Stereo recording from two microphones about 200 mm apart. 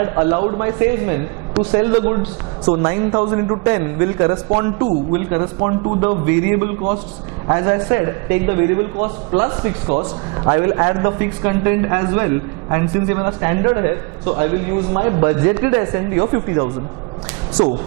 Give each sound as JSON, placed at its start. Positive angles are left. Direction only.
{"t": 0.0, "sound": "a man's voice", "side_deg": -25}
{"t": 14.9, "sound": "a man's voice", "side_deg": -25}